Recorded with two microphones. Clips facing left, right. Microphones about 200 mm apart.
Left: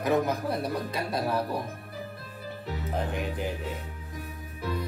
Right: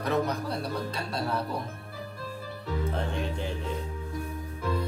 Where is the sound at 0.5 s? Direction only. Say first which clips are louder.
Left 2 dB; 55° left (ahead or behind).